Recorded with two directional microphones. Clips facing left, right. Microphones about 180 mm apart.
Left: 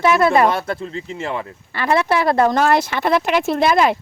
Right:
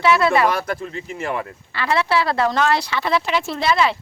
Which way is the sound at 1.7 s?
50° left (ahead or behind).